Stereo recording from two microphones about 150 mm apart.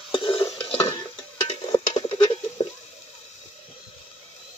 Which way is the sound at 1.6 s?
25° left (ahead or behind).